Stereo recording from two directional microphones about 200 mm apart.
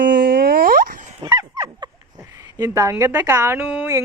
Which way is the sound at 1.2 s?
20° right (ahead or behind).